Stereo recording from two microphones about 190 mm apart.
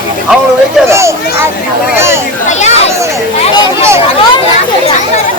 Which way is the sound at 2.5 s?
35° left (ahead or behind).